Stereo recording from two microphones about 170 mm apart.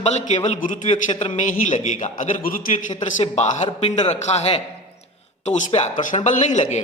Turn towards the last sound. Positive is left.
turn(degrees=40)  # may be behind; listen again after turning